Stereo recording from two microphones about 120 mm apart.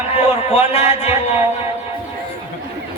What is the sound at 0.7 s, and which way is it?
Speech, 60° left (ahead or behind).